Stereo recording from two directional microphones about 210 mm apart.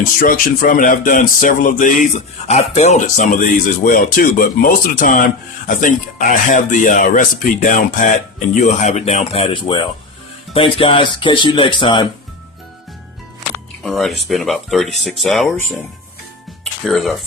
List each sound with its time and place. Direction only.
0.2 s speech: 40° left (ahead or behind); by 12.0 s 25° left (ahead or behind)
13.8 s speech: centre (ahead or behind)
16.8 s speech: centre (ahead or behind)